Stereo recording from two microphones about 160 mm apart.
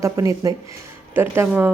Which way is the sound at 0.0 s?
20° right (ahead or behind).